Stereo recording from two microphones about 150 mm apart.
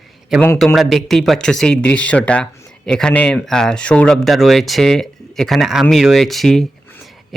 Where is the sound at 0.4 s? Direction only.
5° left (ahead or behind).